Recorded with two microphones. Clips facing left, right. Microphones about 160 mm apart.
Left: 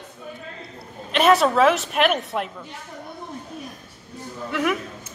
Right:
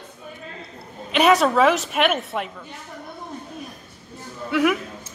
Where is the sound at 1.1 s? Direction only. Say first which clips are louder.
Even; centre (ahead or behind).